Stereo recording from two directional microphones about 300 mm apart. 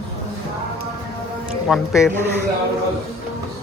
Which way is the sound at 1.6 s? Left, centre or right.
Centre.